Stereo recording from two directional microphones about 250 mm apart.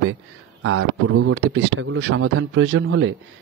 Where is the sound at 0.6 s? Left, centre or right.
Right.